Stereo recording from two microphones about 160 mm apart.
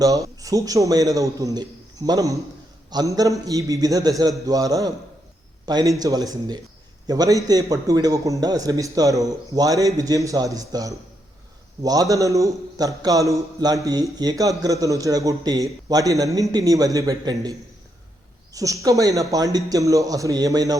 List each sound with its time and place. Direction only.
0.0 s a man's voice: 20° right (ahead or behind)
18.5 s a man's voice: 20° right (ahead or behind)